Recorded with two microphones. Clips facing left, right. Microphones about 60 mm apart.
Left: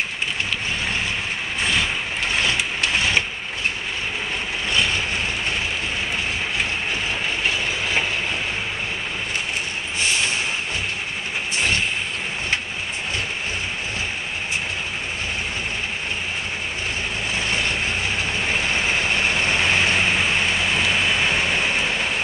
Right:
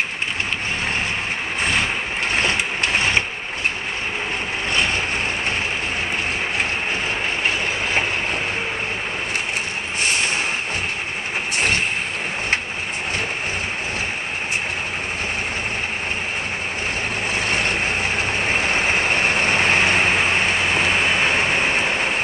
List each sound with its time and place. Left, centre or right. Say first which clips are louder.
1.6 s vehicle: right 1 dB; right
4.7 s vehicle: even; right
17.4 s vehicle: right 2 dB; right